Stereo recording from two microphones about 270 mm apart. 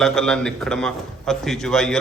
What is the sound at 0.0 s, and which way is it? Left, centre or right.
A man's voice, centre.